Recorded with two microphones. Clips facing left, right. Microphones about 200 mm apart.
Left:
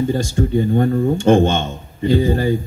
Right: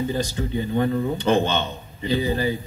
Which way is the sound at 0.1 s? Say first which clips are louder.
Left 7 dB; 45° left (ahead or behind).